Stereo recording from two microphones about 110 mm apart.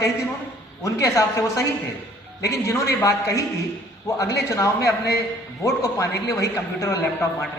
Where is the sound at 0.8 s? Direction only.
30° left (ahead or behind).